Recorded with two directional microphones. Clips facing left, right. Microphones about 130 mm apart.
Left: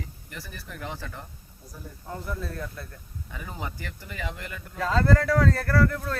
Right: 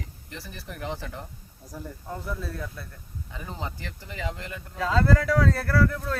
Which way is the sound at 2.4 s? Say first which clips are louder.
Even; 5° right (ahead or behind).